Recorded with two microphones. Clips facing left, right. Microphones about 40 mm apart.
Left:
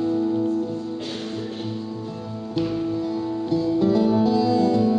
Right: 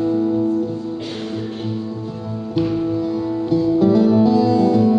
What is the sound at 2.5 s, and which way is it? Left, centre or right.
Music, centre.